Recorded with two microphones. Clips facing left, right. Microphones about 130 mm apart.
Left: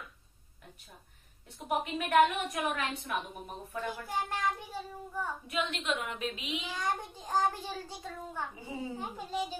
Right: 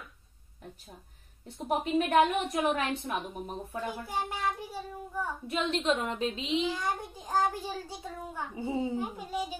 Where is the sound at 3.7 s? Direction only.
10° right (ahead or behind).